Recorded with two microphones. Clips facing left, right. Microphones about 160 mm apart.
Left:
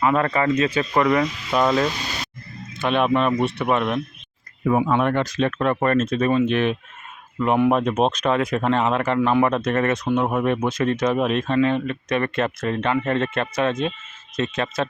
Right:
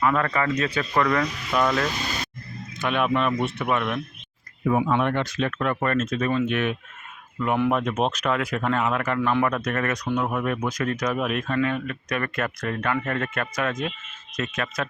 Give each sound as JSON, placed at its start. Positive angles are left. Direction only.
{"t": 0.0, "sound": "speech", "side_deg": 20}